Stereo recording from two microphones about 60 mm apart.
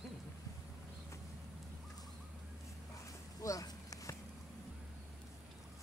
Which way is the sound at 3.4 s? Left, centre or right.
Left.